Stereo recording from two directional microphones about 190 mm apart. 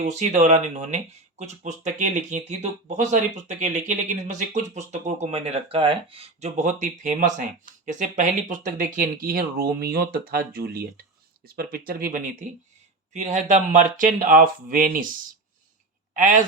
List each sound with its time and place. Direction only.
0.0 s speech: 40° right (ahead or behind)
16.1 s speech: 45° right (ahead or behind)